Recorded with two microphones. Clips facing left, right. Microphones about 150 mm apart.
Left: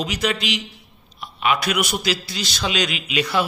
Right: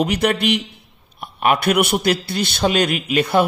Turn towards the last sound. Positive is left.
turn(degrees=-55)  # may be behind; listen again after turning